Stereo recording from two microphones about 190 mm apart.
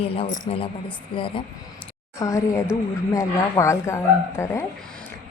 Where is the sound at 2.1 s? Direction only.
15° left (ahead or behind).